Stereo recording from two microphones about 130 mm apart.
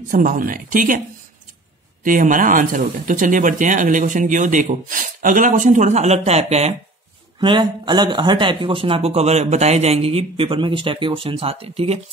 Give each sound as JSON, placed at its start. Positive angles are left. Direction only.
{"t": 0.1, "sound": "speech", "side_deg": -90}
{"t": 2.0, "sound": "speech", "side_deg": -90}
{"t": 7.3, "sound": "speech", "side_deg": -35}